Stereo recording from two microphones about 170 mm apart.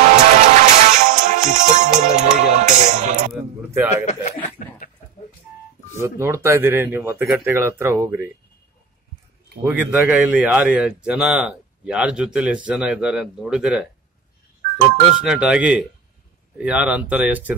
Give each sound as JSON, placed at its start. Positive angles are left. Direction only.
{"t": 0.1, "sound": "music", "side_deg": -45}
{"t": 3.3, "sound": "a sound", "side_deg": -10}
{"t": 3.9, "sound": "a sound", "side_deg": 40}
{"t": 5.9, "sound": "speech", "side_deg": -15}
{"t": 9.7, "sound": "a man's voice", "side_deg": -10}
{"t": 15.2, "sound": "speech", "side_deg": -5}